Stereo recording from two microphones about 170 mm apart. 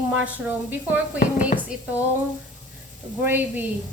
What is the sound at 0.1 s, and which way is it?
Speech, 10° right (ahead or behind).